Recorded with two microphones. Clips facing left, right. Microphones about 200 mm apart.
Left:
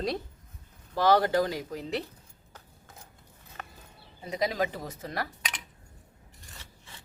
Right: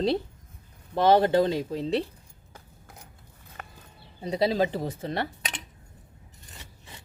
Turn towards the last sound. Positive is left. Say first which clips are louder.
# right 4 dB
turn(degrees=-30)  # may be behind; listen again after turning